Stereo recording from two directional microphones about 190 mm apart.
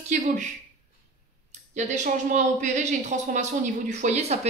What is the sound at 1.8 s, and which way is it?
Speech, 40° right (ahead or behind).